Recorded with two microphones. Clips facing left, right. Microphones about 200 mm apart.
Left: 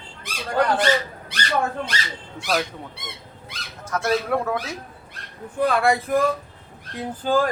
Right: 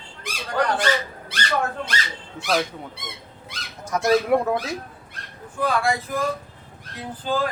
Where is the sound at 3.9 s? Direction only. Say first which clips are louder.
Right 3 dB; 15° right (ahead or behind).